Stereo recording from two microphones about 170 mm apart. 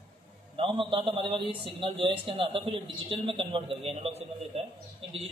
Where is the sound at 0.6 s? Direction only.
30° right (ahead or behind).